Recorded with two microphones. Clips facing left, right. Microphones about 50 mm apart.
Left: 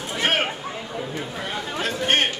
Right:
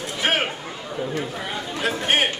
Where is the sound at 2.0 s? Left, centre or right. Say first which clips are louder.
Even; centre.